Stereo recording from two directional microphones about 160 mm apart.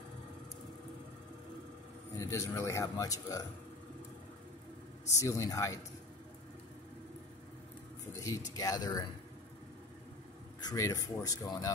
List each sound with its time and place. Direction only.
2.1 s a man's voice: 20° left (ahead or behind)
5.1 s a man's voice: 20° left (ahead or behind)
8.2 s a man's voice: 20° left (ahead or behind)
10.6 s a man's voice: 25° left (ahead or behind)